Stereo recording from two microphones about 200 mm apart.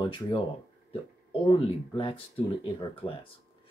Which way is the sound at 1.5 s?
25° left (ahead or behind).